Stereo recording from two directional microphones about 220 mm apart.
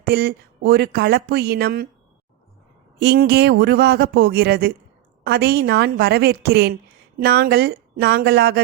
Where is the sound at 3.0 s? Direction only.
45° right (ahead or behind).